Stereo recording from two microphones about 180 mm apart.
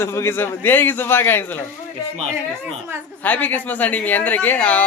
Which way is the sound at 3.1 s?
10° left (ahead or behind).